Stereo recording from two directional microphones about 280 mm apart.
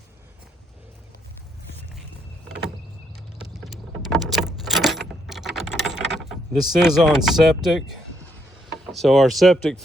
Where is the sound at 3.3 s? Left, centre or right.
Centre.